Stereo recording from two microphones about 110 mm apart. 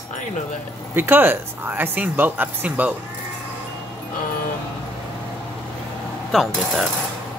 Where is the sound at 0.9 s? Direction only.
20° right (ahead or behind).